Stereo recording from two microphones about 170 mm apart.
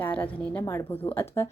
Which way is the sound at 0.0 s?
10° left (ahead or behind).